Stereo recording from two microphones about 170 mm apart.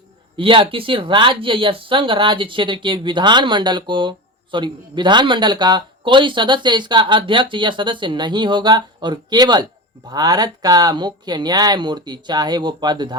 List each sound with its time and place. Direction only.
0.3 s speech: 30° right (ahead or behind)